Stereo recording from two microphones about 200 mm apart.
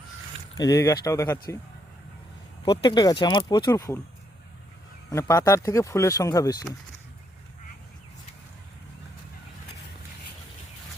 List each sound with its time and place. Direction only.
0.5 s speech: 15° left (ahead or behind)
2.6 s speech: 20° left (ahead or behind)
5.1 s speech: 15° left (ahead or behind)